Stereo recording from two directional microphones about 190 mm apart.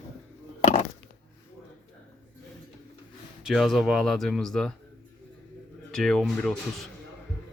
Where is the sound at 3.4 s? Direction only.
Centre (ahead or behind).